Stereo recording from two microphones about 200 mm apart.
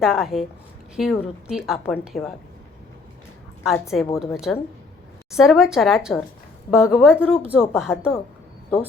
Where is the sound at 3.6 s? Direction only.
Centre (ahead or behind).